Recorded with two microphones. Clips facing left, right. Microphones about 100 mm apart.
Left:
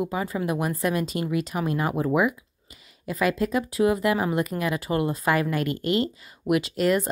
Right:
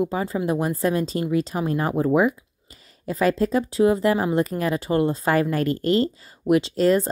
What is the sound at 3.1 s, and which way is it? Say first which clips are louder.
Speech: right 3 dB; 35° right (ahead or behind).